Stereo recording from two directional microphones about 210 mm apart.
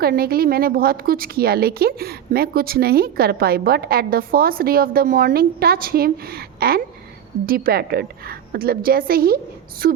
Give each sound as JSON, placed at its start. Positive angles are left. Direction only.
{"t": 0.0, "sound": "a woman's voice", "side_deg": -45}